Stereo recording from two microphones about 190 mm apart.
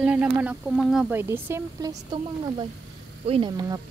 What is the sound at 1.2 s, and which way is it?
Speech, 15° right (ahead or behind).